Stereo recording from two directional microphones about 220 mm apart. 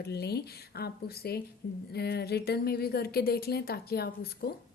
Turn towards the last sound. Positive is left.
turn(degrees=45)  # may be behind; listen again after turning